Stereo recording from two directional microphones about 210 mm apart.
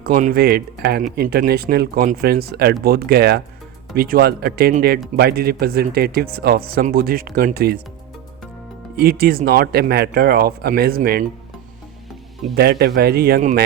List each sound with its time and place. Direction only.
0.0 s speech: 40° right (ahead or behind)
9.0 s speech: 45° right (ahead or behind)
12.5 s speech: 50° right (ahead or behind)